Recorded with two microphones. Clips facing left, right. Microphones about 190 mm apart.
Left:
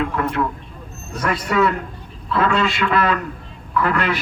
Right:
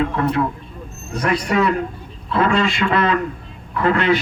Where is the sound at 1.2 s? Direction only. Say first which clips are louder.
Right 1 dB; 30° right (ahead or behind).